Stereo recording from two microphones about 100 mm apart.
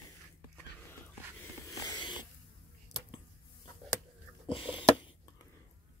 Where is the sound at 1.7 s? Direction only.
40° left (ahead or behind).